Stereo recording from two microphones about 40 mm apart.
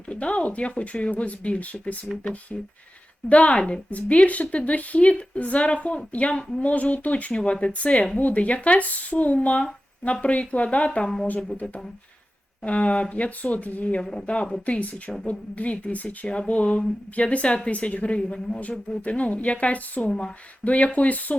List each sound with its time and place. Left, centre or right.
0.1 s a woman's voice: left
3.2 s a woman's voice: left
12.6 s a woman's voice: left
14.0 s speech: centre
14.3 s a woman's voice: left